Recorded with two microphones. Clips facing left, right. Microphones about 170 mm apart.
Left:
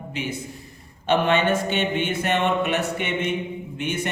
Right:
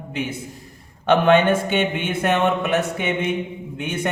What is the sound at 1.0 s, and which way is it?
Speech, 55° right (ahead or behind).